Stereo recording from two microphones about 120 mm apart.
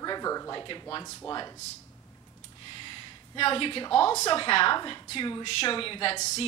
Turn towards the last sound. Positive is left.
turn(degrees=50)  # may be behind; listen again after turning